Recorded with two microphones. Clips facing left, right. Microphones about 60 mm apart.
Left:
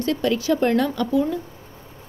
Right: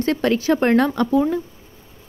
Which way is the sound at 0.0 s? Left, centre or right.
Right.